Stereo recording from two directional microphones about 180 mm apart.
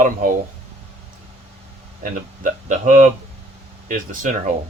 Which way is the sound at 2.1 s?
45° right (ahead or behind).